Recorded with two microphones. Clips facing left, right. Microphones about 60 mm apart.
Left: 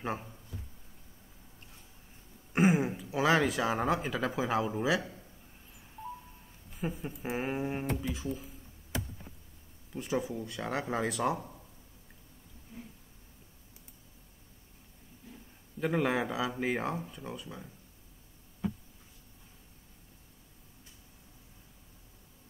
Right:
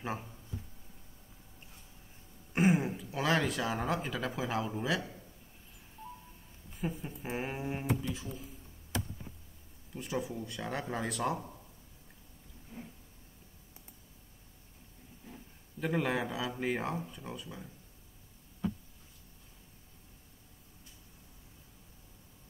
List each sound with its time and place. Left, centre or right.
0.0 s speech: centre
2.5 s speech: centre
6.8 s speech: centre
10.2 s speech: centre
15.8 s speech: centre